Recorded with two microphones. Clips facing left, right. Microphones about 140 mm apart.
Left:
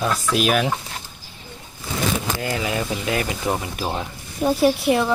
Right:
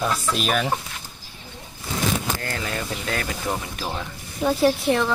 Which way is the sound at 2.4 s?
15° left (ahead or behind).